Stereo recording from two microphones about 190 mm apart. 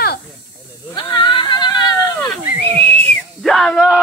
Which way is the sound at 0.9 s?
25° left (ahead or behind).